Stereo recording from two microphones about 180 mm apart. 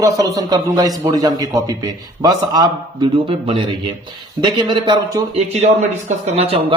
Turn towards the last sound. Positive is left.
turn(degrees=-35)  # may be behind; listen again after turning